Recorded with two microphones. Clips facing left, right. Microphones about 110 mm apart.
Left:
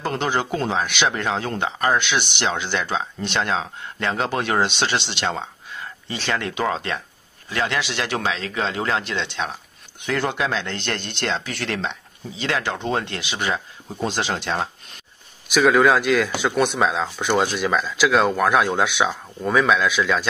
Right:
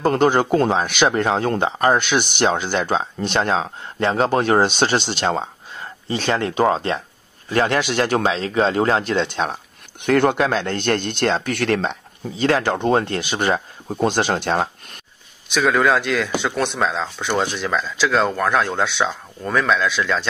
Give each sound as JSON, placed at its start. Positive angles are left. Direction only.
{"t": 0.0, "sound": "speech", "side_deg": -45}
{"t": 7.4, "sound": "speech", "side_deg": -45}
{"t": 10.0, "sound": "speech", "side_deg": -60}
{"t": 15.4, "sound": "speech", "side_deg": 5}